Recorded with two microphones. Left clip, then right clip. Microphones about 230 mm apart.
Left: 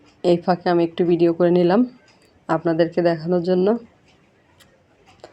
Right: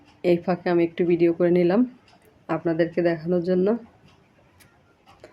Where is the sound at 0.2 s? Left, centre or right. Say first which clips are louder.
Left 4 dB; centre.